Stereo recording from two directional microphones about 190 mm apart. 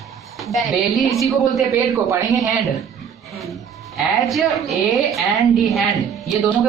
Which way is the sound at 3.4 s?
Centre (ahead or behind).